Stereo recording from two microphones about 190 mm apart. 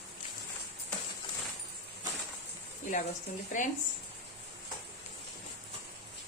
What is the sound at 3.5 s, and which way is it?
Speech, 40° left (ahead or behind).